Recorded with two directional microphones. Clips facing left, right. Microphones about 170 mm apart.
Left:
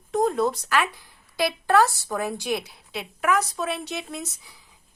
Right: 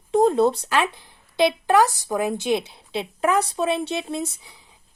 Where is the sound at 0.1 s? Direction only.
25° right (ahead or behind).